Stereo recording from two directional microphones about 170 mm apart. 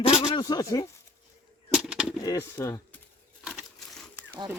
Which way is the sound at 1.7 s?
5° right (ahead or behind).